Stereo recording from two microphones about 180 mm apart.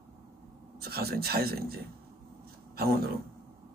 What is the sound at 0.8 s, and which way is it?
Speech, 60° right (ahead or behind).